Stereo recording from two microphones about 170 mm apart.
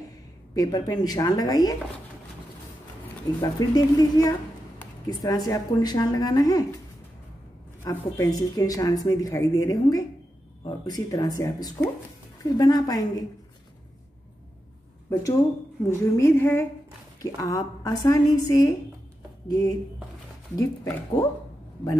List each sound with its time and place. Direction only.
0.6 s a woman's voice: 25° left (ahead or behind)
3.3 s a woman's voice: 20° left (ahead or behind)
7.8 s a woman's voice: 20° left (ahead or behind)
15.9 s a woman's voice: 15° left (ahead or behind)